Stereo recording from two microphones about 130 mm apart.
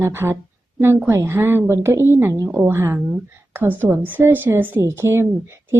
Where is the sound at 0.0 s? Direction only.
20° right (ahead or behind).